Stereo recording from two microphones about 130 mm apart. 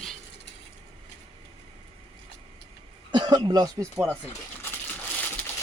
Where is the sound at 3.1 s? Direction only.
35° right (ahead or behind).